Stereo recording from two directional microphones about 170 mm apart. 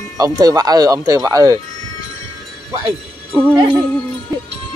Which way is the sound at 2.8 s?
10° right (ahead or behind).